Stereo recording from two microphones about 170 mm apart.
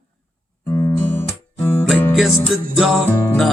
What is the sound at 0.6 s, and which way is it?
Music, 15° left (ahead or behind).